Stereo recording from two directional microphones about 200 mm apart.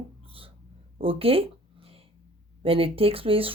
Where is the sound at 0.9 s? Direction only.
30° right (ahead or behind).